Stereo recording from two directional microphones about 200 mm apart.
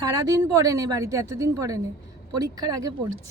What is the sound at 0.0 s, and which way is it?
A woman's voice, 20° right (ahead or behind).